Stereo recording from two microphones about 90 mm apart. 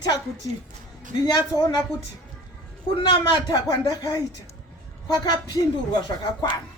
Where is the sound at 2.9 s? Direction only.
55° left (ahead or behind).